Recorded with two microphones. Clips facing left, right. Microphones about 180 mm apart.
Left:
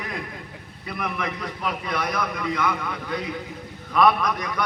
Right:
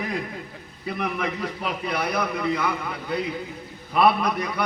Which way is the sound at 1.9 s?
35° right (ahead or behind).